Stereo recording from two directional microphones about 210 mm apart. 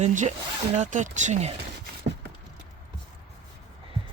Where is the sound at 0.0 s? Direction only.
35° right (ahead or behind).